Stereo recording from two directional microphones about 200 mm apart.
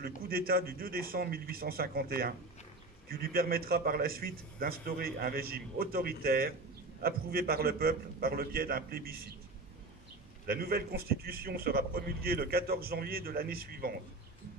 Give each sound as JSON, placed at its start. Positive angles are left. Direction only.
{"t": 0.0, "sound": "a man's voice", "side_deg": -50}
{"t": 10.4, "sound": "a man's voice", "side_deg": -50}